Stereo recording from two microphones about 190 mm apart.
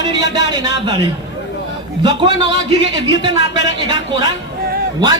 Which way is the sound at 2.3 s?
65° left (ahead or behind).